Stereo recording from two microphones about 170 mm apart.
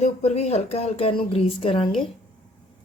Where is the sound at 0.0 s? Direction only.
40° left (ahead or behind).